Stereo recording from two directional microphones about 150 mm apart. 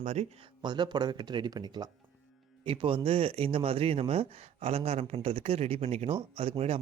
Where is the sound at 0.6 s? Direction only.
30° right (ahead or behind).